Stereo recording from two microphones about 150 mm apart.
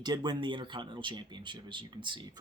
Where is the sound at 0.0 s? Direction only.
30° right (ahead or behind).